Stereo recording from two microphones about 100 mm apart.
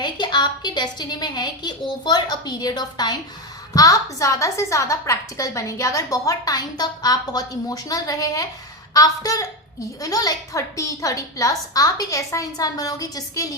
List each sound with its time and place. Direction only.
0.0 s a woman's voice: 45° left (ahead or behind)